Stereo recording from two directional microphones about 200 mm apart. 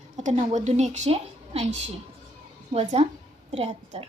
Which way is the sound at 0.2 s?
35° right (ahead or behind).